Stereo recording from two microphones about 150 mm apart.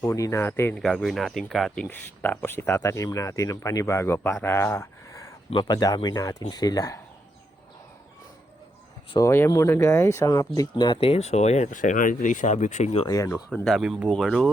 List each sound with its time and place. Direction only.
0.0 s speech: 20° left (ahead or behind)
0.8 s speech: 5° left (ahead or behind)
4.4 s a sound: 15° left (ahead or behind)
5.5 s speech: 30° left (ahead or behind)
9.1 s speech: 20° left (ahead or behind); by 13.1 s 45° left (ahead or behind)
13.1 s speech: 20° left (ahead or behind)
13.5 s speech: centre (ahead or behind)